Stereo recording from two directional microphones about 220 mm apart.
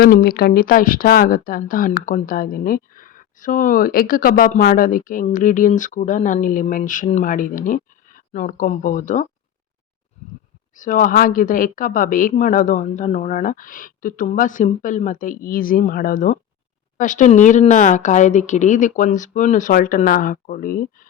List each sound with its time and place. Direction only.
0.0 s speech: 45° left (ahead or behind)
10.8 s speech: 35° left (ahead or behind)